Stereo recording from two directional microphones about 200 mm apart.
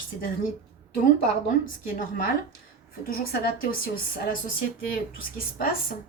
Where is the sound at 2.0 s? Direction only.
45° left (ahead or behind).